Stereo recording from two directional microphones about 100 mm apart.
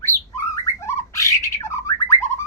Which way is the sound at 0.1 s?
30° right (ahead or behind).